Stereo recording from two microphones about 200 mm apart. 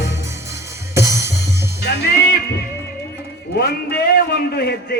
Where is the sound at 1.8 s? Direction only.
55° left (ahead or behind).